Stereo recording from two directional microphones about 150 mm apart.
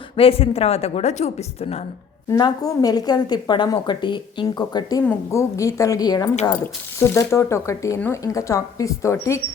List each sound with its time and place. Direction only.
0.2 s speech: 40° left (ahead or behind)
2.4 s a woman's voice: 25° left (ahead or behind)